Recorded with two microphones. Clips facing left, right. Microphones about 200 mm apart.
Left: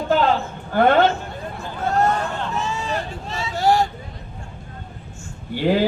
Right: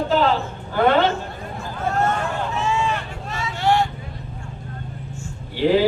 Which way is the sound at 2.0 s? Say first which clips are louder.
Left 1 dB; 35° left (ahead or behind).